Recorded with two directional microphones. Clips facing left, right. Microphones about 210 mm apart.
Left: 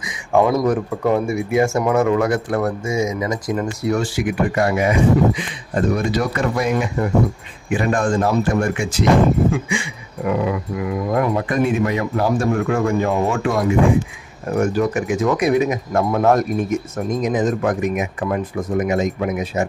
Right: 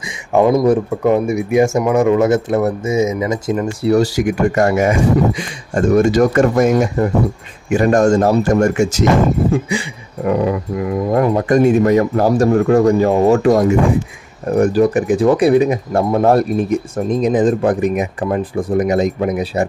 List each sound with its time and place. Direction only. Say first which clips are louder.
0.3 s speech: right 4 dB; 20° right (ahead or behind)